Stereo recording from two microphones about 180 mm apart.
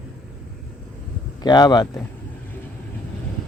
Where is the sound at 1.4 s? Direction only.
25° left (ahead or behind).